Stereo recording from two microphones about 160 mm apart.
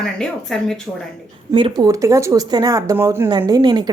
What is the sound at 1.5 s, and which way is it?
Speech, 30° right (ahead or behind).